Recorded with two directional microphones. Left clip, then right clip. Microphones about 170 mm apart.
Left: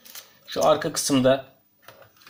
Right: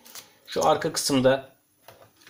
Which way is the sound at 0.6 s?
25° right (ahead or behind).